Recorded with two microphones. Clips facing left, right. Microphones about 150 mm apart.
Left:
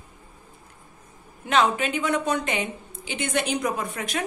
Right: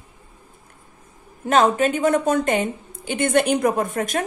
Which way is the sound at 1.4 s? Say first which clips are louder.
Right 5 dB; 45° right (ahead or behind).